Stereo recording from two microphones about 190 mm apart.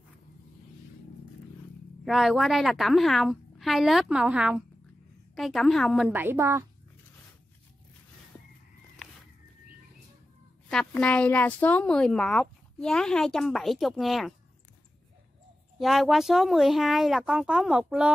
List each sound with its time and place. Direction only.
2.0 s speech: centre (ahead or behind)
10.7 s speech: 5° left (ahead or behind)
15.8 s speech: centre (ahead or behind)